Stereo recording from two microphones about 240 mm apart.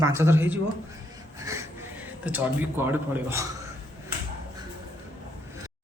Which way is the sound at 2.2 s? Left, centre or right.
Centre.